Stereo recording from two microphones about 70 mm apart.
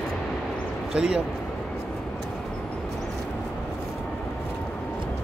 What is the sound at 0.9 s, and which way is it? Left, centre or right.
Speech, centre.